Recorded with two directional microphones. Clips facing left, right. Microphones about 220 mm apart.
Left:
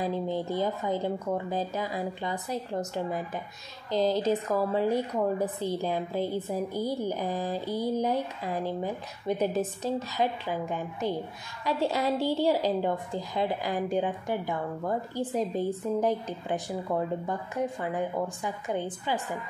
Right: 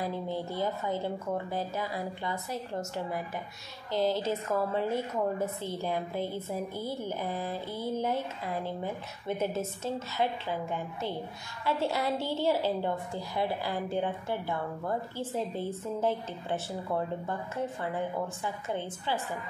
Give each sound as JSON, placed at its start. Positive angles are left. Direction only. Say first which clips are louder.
{"t": 0.0, "sound": "a woman's voice", "louder": "left 4 dB", "side_deg": 15}